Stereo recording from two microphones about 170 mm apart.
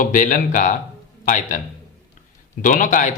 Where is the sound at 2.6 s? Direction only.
50° left (ahead or behind).